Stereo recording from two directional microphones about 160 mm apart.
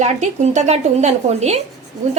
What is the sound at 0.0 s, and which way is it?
A woman's voice, 45° right (ahead or behind).